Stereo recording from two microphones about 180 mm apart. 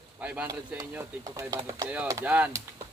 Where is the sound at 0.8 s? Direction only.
20° right (ahead or behind).